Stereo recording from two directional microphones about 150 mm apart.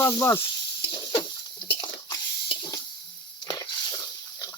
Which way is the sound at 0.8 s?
30° left (ahead or behind).